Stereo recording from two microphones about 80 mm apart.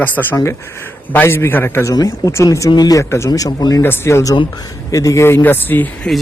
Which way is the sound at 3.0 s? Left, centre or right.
Left.